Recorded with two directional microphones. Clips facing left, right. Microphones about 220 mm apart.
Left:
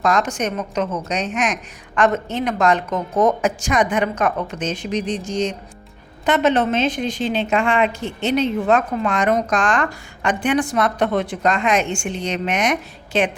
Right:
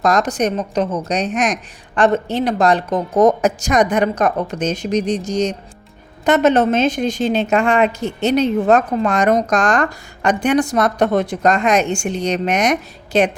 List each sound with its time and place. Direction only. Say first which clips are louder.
0.0 s a woman's voice: right 3 dB; 40° right (ahead or behind)